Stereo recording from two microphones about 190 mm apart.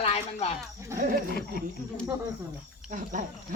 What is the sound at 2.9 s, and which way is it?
Speech, 45° right (ahead or behind).